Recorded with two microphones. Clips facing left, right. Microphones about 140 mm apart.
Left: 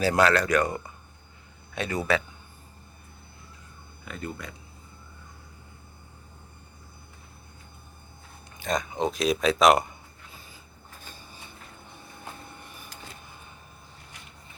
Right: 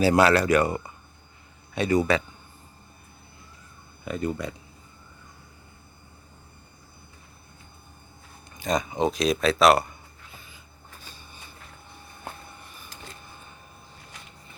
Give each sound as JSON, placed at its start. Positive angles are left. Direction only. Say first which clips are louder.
{"t": 0.0, "sound": "speech", "louder": "right 3 dB", "side_deg": -5}
{"t": 4.0, "sound": "speech", "louder": "right 8 dB", "side_deg": -20}
{"t": 8.5, "sound": "speech", "louder": "right 3 dB", "side_deg": 0}